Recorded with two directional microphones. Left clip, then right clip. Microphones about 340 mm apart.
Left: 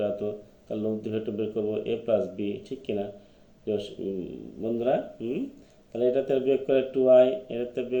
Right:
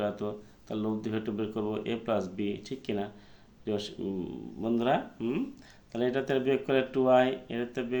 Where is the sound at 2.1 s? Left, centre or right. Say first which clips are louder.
Left 6 dB; right.